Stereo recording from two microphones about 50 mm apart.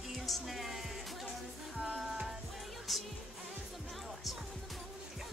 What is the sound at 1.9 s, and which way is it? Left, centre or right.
Music, centre.